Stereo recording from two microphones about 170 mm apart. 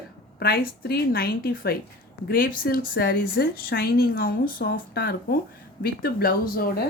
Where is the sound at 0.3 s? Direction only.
65° left (ahead or behind).